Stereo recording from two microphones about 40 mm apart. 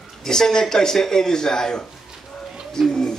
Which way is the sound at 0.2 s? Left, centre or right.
Centre.